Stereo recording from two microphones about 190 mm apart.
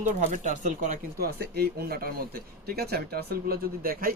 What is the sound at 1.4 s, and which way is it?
Speech, 55° right (ahead or behind).